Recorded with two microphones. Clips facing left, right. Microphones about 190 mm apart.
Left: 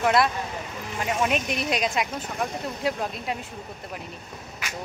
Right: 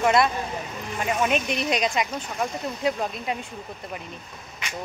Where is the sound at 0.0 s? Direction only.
Centre (ahead or behind).